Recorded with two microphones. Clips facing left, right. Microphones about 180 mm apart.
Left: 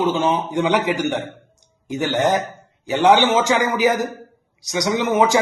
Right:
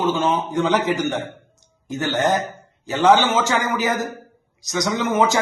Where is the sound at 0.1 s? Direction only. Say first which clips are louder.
Left 1 dB; 15° left (ahead or behind).